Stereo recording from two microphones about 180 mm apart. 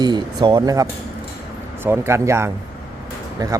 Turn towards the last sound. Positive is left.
turn(degrees=-20)  # may be behind; listen again after turning